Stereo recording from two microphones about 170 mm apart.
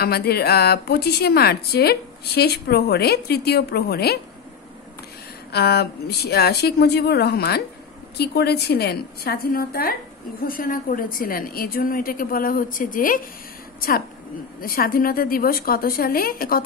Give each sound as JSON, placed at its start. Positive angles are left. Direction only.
{"t": 0.0, "sound": "speech", "side_deg": 65}
{"t": 5.5, "sound": "a woman's voice", "side_deg": 70}